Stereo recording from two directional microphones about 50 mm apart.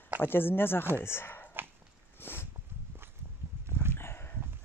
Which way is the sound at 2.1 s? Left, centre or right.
Left.